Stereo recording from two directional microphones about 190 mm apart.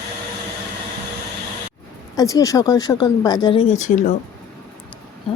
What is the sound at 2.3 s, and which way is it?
Speech, 20° left (ahead or behind).